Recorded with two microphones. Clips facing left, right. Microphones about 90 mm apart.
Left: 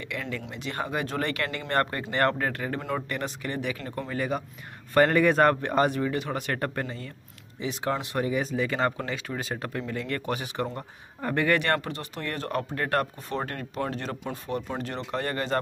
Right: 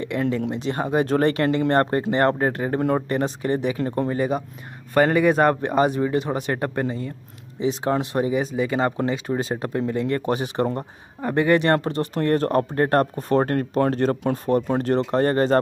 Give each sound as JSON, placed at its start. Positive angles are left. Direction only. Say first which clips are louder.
{"t": 0.0, "sound": "speech", "louder": "right 11 dB", "side_deg": -30}
{"t": 4.9, "sound": "speech", "louder": "right 3 dB", "side_deg": -10}